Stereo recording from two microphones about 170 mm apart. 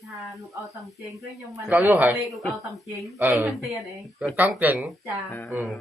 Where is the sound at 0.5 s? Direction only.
20° right (ahead or behind).